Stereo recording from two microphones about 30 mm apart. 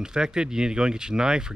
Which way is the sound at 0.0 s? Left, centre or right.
Right.